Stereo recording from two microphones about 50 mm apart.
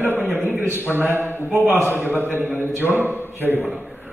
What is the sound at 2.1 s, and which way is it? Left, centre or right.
Speech, right.